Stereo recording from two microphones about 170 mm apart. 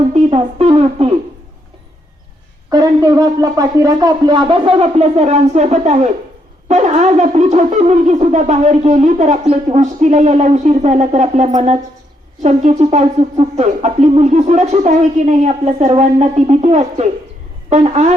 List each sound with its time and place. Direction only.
0.1 s speech: 40° right (ahead or behind)
2.6 s speech: 20° right (ahead or behind); by 6.1 s 40° right (ahead or behind)
6.7 s wind instrument: 45° right (ahead or behind)
12.4 s speech: 45° right (ahead or behind)